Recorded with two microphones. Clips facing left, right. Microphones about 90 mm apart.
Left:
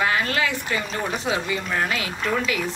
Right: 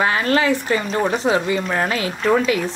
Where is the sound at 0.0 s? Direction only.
35° right (ahead or behind).